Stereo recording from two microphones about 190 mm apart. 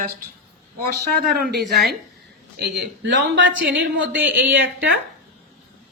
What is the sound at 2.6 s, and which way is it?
Speech, 70° right (ahead or behind).